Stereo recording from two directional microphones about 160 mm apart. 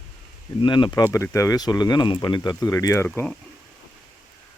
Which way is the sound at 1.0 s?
20° left (ahead or behind).